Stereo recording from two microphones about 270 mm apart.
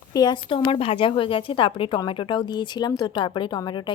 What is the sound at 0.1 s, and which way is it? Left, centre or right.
A woman's voice, centre.